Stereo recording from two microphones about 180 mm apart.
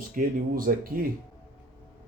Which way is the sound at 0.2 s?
50° right (ahead or behind).